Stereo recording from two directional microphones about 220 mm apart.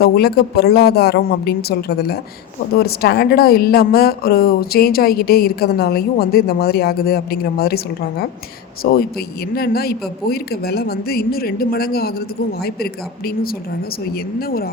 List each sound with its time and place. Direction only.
0.0 s speech: 45° left (ahead or behind)
8.8 s speech: 45° left (ahead or behind)